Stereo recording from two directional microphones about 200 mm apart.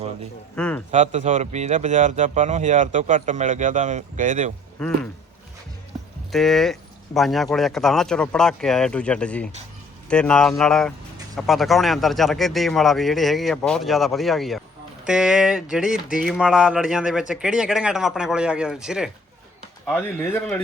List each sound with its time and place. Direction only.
0.5 s speech: 5° left (ahead or behind)
0.9 s speech: 35° right (ahead or behind)
6.3 s speech: centre (ahead or behind)
19.8 s speech: 10° left (ahead or behind)